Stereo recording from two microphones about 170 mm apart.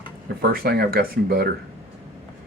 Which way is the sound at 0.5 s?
60° right (ahead or behind).